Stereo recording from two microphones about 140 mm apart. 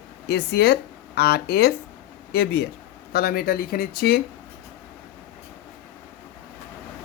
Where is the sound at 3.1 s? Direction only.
90° left.